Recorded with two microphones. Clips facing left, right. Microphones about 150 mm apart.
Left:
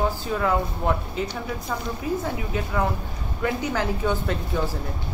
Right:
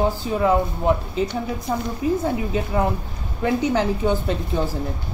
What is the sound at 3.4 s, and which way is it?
Speech, 25° right (ahead or behind).